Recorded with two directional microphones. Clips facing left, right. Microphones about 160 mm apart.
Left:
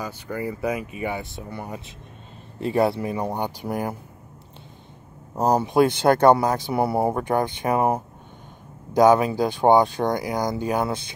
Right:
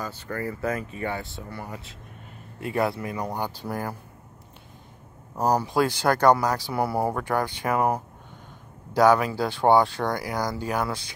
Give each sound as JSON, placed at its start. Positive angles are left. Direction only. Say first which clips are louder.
{"t": 0.0, "sound": "speech", "louder": "left 2 dB", "side_deg": 15}
{"t": 5.3, "sound": "speech", "louder": "left 3 dB", "side_deg": 25}